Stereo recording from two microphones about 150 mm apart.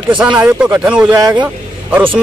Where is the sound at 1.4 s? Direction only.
10° right (ahead or behind).